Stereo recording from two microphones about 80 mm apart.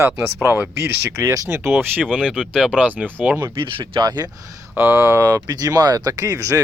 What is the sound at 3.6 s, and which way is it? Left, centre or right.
Speech, right.